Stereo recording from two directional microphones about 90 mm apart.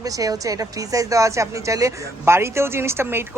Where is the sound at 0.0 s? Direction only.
40° right (ahead or behind).